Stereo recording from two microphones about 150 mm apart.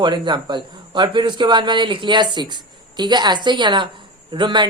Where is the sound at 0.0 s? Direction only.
30° right (ahead or behind).